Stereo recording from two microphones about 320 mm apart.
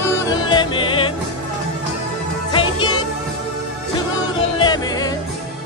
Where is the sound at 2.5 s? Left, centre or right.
Centre.